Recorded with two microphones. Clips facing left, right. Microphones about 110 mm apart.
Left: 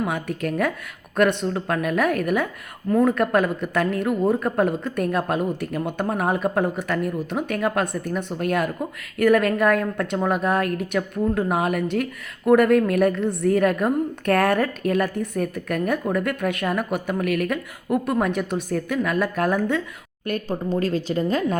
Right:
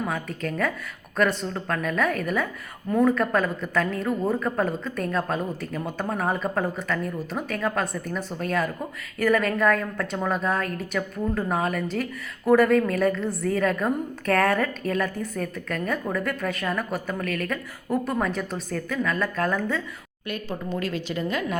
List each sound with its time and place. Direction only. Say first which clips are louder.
0.0 s a woman's voice: left 4 dB; 5° left (ahead or behind)
20.2 s a woman's voice: left 6 dB; 45° left (ahead or behind)